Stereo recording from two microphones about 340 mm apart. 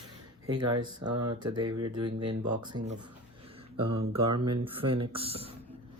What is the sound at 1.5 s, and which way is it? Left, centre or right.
Speech, centre.